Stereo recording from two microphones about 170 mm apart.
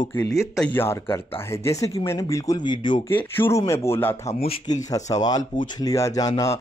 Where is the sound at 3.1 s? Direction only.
10° left (ahead or behind).